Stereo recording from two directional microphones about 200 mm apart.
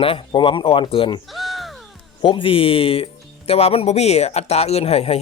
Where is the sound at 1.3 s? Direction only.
Centre (ahead or behind).